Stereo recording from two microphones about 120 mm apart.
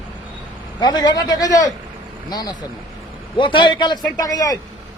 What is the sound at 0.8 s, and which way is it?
Speech, 35° left (ahead or behind).